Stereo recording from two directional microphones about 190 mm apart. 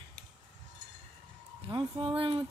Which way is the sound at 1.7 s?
25° right (ahead or behind).